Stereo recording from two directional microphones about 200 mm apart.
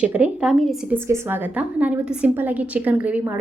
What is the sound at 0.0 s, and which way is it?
Speech, 5° right (ahead or behind).